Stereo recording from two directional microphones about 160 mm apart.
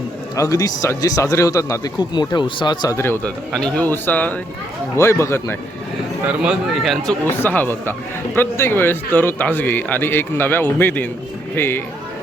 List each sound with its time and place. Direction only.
0.3 s a man's voice: 20° left (ahead or behind)
6.2 s speech: 5° right (ahead or behind)
7.4 s a man's voice: 10° left (ahead or behind)